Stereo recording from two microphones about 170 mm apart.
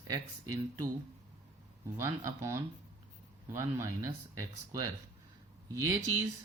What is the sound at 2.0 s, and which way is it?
Speech, 15° right (ahead or behind).